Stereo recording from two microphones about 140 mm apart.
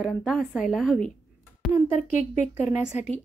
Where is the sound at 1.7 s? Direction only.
60° left (ahead or behind).